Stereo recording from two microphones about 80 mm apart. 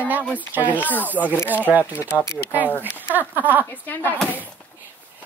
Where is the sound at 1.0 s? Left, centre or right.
Right.